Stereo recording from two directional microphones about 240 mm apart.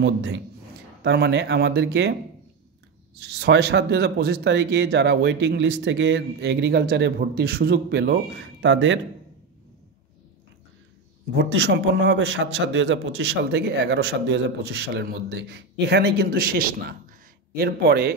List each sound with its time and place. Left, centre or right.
0.0 s speech: right
3.2 s speech: right
11.3 s speech: right